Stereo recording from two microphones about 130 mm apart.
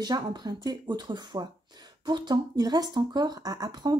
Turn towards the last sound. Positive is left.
turn(degrees=-30)  # may be behind; listen again after turning